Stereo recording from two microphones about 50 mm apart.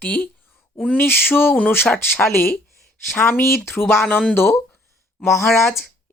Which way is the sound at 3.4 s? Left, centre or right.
Left.